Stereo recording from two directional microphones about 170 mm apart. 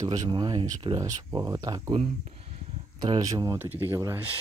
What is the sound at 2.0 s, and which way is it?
Speech, 40° right (ahead or behind).